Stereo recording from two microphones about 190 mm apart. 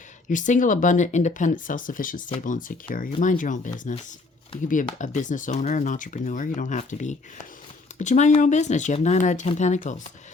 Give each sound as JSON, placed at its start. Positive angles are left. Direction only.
{"t": 0.3, "sound": "speech", "side_deg": 40}
{"t": 4.7, "sound": "speech", "side_deg": 40}